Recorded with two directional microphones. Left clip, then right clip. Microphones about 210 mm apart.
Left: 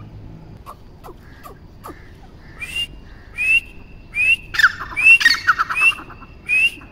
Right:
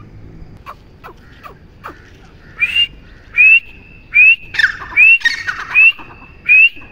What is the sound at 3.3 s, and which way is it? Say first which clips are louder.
Whistling: right 9 dB; 10° left (ahead or behind).